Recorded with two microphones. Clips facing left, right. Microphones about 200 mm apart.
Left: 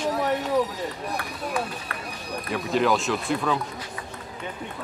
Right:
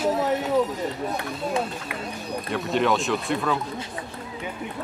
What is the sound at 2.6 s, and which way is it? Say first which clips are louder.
Speech: even; centre (ahead or behind).